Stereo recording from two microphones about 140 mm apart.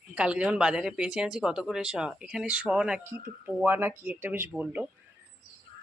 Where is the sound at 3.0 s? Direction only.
15° right (ahead or behind).